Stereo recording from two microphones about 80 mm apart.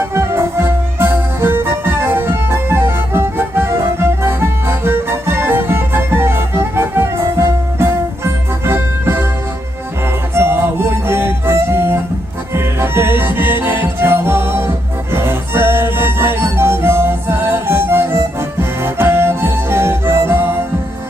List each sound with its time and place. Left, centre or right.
0.0 s music: right
10.3 s music: right